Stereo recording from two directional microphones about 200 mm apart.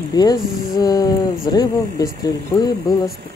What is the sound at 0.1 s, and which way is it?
Speech, 20° left (ahead or behind).